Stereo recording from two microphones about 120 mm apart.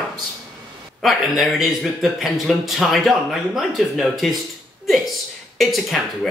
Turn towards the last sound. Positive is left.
turn(degrees=0)  # may be behind; listen again after turning